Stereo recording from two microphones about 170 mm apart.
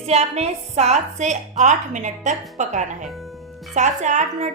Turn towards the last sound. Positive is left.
turn(degrees=-45)  # may be behind; listen again after turning